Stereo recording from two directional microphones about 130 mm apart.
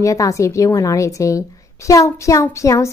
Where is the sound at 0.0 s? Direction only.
25° left (ahead or behind).